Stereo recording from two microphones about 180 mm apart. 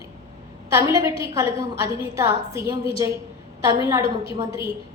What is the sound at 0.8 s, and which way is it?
A woman's voice, 20° right (ahead or behind).